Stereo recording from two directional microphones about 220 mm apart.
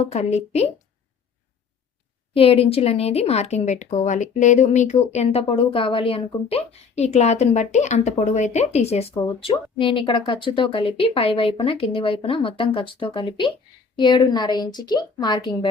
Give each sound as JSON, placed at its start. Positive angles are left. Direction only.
{"t": 0.1, "sound": "speech", "side_deg": 30}
{"t": 2.3, "sound": "speech", "side_deg": 25}